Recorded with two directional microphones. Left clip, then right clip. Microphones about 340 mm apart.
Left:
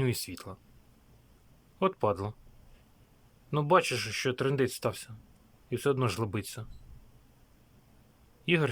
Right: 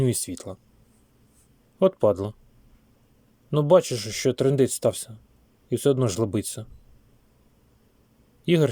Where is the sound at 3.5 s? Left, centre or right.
Centre.